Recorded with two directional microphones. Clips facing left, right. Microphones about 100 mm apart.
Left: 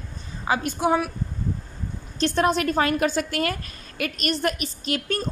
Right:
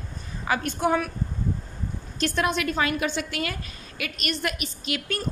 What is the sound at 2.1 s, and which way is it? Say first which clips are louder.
A woman's voice: left 4 dB; 35° left (ahead or behind).